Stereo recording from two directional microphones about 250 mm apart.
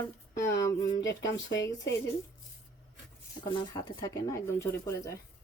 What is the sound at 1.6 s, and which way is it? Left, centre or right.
Speech, centre.